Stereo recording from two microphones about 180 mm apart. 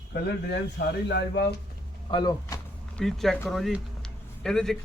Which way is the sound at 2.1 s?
20° left (ahead or behind).